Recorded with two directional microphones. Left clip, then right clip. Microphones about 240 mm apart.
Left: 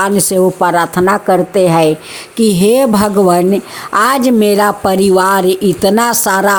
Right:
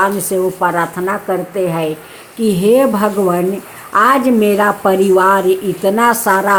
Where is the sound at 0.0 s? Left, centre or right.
Left.